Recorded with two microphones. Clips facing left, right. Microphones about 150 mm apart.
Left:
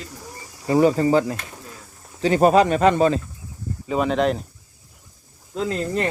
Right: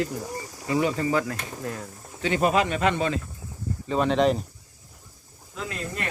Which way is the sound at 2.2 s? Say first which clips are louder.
Left 7 dB; 40° left (ahead or behind).